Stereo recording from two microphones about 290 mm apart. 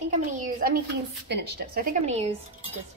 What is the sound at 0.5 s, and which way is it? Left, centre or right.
A woman's voice, right.